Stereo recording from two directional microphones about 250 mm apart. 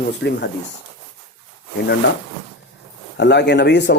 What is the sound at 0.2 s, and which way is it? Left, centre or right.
Speech, left.